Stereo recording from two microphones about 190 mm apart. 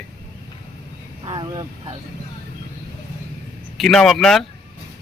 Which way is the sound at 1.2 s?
25° right (ahead or behind).